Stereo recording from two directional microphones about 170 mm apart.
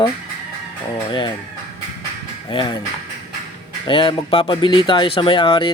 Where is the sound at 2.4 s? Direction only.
25° left (ahead or behind).